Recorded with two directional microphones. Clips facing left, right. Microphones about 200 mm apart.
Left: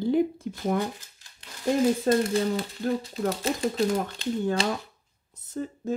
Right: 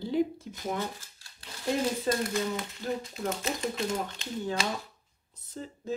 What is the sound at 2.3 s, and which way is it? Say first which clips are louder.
Speech: left 6 dB; 35° left (ahead or behind).